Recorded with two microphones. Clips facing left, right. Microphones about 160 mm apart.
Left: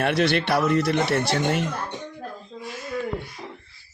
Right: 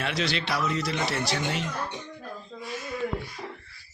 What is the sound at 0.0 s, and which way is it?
Speech, 55° left (ahead or behind).